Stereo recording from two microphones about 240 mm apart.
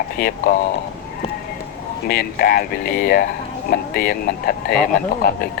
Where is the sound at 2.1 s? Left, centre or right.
Left.